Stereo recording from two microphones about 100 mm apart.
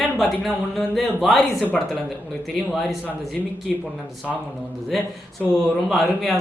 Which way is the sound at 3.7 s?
Centre (ahead or behind).